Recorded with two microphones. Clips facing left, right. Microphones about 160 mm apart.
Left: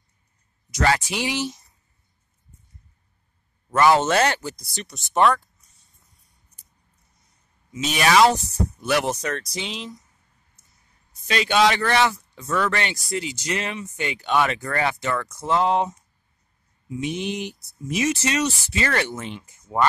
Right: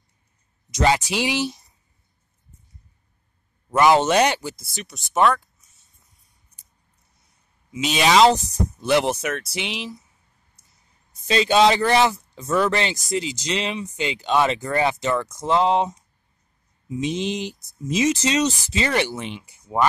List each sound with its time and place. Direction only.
0.7 s speech: 20° right (ahead or behind)
3.7 s speech: 15° right (ahead or behind); by 5.4 s centre (ahead or behind)
7.7 s speech: 20° right (ahead or behind)
9.2 s speech: 5° right (ahead or behind)
11.2 s speech: 30° right (ahead or behind)
17.2 s speech: 90° right
17.8 s speech: 20° right (ahead or behind)